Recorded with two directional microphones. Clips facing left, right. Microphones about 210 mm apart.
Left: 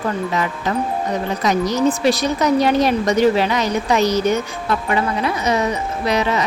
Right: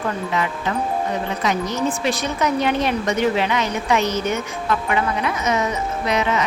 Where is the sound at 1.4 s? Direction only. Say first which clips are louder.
Left 6 dB; 40° left (ahead or behind).